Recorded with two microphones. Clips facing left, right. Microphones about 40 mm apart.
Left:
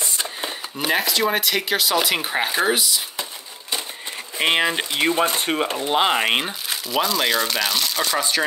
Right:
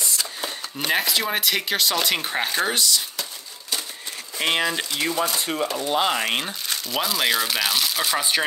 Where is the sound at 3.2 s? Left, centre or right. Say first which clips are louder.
Left 2 dB; left.